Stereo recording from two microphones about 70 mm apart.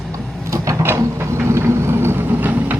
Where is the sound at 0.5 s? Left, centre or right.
Right.